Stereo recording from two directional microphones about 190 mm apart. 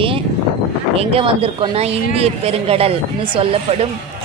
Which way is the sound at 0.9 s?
30° right (ahead or behind).